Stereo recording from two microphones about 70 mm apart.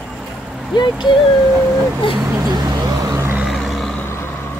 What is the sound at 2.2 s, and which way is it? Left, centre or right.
Vehicle, right.